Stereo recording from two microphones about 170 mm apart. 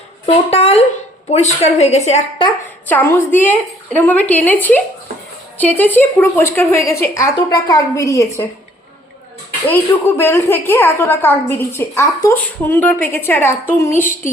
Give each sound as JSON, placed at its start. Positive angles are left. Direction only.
{"t": 0.3, "sound": "a woman's voice", "side_deg": 35}
{"t": 2.8, "sound": "a woman's voice", "side_deg": 10}
{"t": 9.6, "sound": "a woman's voice", "side_deg": 10}